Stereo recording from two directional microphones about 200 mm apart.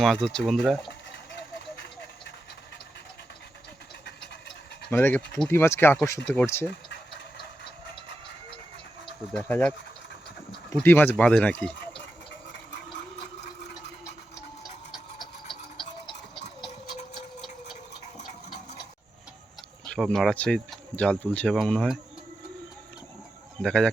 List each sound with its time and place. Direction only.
0.0 s speech: centre (ahead or behind)
4.9 s speech: 10° left (ahead or behind)
9.5 s speech: 10° left (ahead or behind)
10.8 s speech: 10° left (ahead or behind)
13.4 s a sound: 60° left (ahead or behind)
14.6 s a sound: centre (ahead or behind)
19.8 s speech: 5° left (ahead or behind)
23.6 s speech: 5° left (ahead or behind)